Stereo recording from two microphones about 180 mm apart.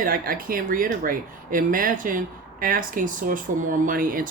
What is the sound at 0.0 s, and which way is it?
Speech, 50° right (ahead or behind).